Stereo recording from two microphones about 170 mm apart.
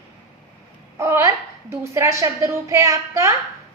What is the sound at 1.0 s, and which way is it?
A woman's voice, 15° right (ahead or behind).